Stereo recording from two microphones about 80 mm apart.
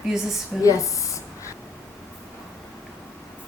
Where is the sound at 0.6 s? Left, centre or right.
Left.